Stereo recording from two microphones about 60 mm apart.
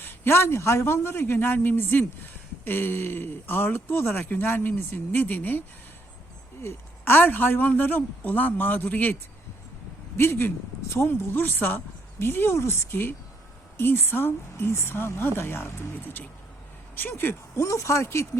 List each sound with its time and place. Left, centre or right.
0.0 s speech: left
6.6 s speech: left
10.2 s speech: left
17.5 s speech: left